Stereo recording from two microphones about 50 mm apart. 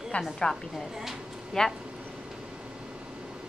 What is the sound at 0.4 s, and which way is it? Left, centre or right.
Speech, centre.